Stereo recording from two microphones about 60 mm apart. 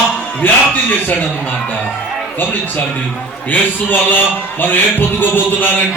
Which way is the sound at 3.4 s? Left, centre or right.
Left.